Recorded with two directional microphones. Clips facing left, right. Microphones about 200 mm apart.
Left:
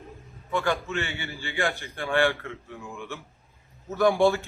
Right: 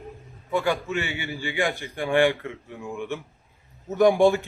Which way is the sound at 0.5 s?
10° right (ahead or behind).